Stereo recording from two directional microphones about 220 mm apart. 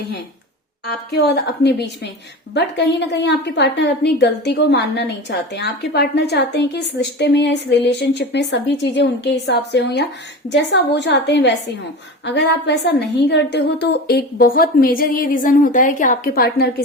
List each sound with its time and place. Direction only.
0.9 s a woman's voice: 50° left (ahead or behind)